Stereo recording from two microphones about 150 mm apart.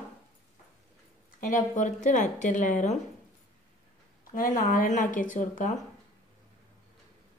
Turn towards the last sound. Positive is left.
turn(degrees=55)  # may be behind; listen again after turning